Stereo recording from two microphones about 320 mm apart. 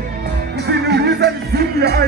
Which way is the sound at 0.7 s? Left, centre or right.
Right.